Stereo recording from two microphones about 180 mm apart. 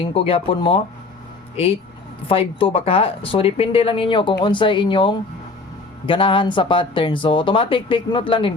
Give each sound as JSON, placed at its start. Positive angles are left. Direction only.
{"t": 0.0, "sound": "speech", "side_deg": 30}
{"t": 2.2, "sound": "speech", "side_deg": 30}